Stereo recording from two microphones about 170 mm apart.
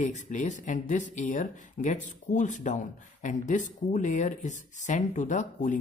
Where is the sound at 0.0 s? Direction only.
45° left (ahead or behind).